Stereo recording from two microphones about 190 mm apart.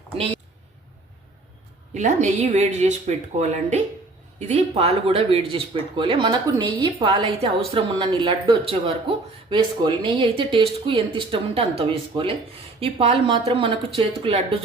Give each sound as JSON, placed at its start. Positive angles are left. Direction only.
{"t": 1.9, "sound": "speech", "side_deg": -40}